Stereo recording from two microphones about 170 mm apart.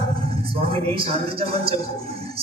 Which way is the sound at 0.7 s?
35° right (ahead or behind).